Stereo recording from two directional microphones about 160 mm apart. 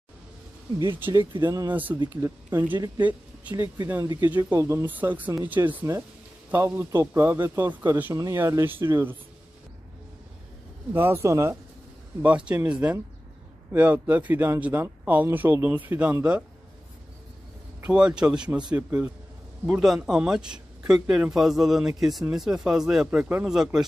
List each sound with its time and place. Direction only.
0.9 s speech: 15° right (ahead or behind)
1.3 s speech: 25° right (ahead or behind)
1.7 s speech: 10° right (ahead or behind)
10.9 s speech: 15° right (ahead or behind)
17.8 s speech: 5° right (ahead or behind)
19.7 s speech: 5° right (ahead or behind)